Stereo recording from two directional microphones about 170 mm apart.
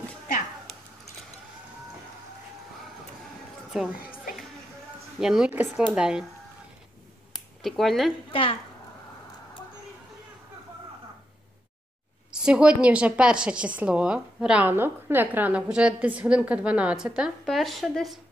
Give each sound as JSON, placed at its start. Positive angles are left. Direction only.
{"t": 3.9, "sound": "speech", "side_deg": 55}
{"t": 5.2, "sound": "speech", "side_deg": -5}
{"t": 7.6, "sound": "speech", "side_deg": 0}
{"t": 8.3, "sound": "speech", "side_deg": 30}
{"t": 12.3, "sound": "a woman's voice", "side_deg": -5}